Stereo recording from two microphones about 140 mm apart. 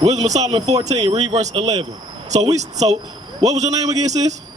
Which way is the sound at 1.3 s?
50° right (ahead or behind).